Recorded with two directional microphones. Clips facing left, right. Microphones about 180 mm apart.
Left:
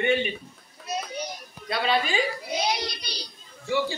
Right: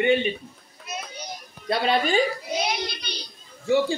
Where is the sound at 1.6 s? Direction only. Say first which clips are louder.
Right 3 dB; 45° right (ahead or behind).